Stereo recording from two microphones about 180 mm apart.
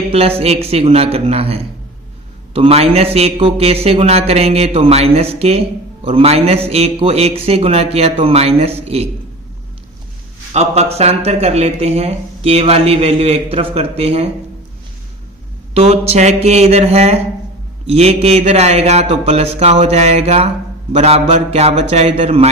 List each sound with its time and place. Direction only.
0.1 s speech: 35° right (ahead or behind)
10.5 s speech: 35° right (ahead or behind)
15.7 s speech: 35° right (ahead or behind)